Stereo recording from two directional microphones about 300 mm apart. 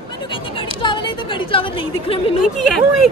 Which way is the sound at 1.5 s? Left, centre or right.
Centre.